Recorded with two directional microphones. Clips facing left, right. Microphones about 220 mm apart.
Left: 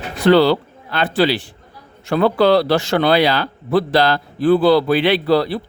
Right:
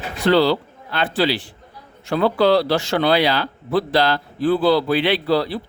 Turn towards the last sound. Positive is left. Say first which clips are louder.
# left 3 dB
turn(degrees=60)  # may be behind; listen again after turning